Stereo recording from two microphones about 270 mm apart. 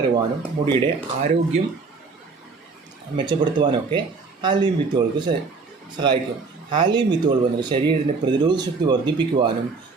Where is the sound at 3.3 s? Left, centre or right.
Centre.